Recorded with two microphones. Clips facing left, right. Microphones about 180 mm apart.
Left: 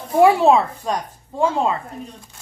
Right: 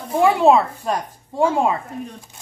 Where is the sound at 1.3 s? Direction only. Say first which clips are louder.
Right 1 dB; 15° right (ahead or behind).